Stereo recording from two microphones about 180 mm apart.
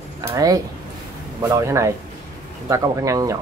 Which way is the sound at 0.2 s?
15° right (ahead or behind).